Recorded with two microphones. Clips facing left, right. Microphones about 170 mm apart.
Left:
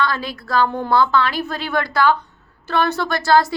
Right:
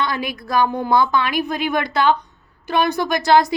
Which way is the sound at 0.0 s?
15° right (ahead or behind).